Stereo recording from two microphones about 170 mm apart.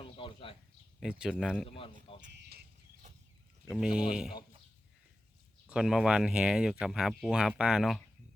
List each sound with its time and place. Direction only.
0.0 s a sound: 30° left (ahead or behind)
0.9 s speech: 5° right (ahead or behind)
1.7 s speech: 30° left (ahead or behind)
3.7 s speech: 5° right (ahead or behind)
5.6 s speech: 5° right (ahead or behind)